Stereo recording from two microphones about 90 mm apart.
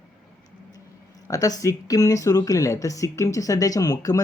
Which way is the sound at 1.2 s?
40° left (ahead or behind).